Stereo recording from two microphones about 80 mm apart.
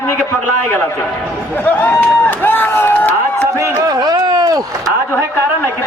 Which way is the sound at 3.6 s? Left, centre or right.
Right.